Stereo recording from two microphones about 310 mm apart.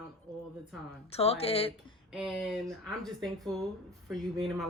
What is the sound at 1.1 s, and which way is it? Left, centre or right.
Speech, centre.